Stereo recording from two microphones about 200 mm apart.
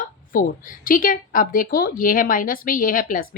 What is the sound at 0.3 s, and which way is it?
Speech, 45° left (ahead or behind).